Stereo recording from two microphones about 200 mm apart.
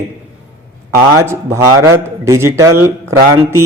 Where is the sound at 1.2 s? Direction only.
15° right (ahead or behind).